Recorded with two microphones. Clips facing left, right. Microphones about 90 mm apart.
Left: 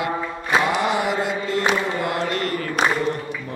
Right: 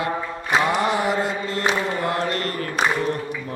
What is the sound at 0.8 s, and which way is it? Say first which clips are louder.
Chant: even; 35° right (ahead or behind).